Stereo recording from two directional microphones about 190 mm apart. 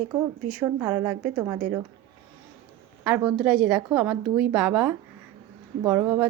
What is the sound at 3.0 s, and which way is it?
A woman's voice, 10° right (ahead or behind).